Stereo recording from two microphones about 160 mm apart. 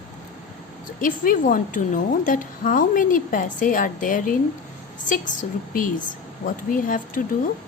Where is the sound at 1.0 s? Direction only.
60° left (ahead or behind).